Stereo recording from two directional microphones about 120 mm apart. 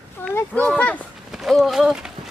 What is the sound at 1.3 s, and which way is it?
Speech, centre (ahead or behind).